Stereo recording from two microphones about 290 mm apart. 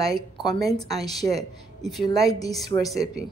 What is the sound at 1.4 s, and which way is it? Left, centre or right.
Speech, centre.